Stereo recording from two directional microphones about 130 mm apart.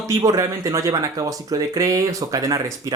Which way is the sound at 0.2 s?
25° right (ahead or behind).